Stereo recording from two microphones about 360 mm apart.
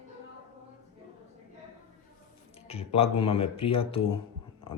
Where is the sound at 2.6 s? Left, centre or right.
Centre.